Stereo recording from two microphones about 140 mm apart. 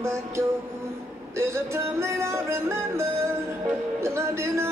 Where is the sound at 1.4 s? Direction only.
20° right (ahead or behind).